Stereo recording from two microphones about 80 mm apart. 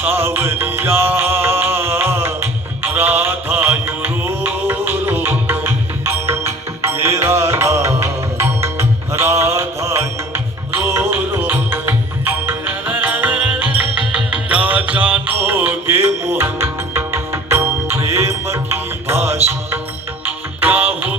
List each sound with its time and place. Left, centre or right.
0.0 s music: right